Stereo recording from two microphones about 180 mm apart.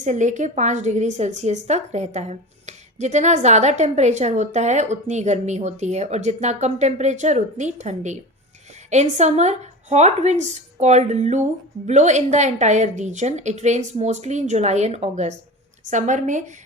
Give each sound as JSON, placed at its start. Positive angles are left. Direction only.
{"t": 0.0, "sound": "a woman's voice", "side_deg": -45}